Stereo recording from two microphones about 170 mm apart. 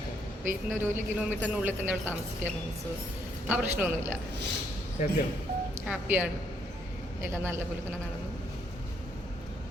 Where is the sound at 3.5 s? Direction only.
10° right (ahead or behind).